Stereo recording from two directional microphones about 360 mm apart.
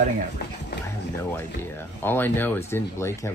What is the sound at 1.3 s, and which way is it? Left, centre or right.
Speech, centre.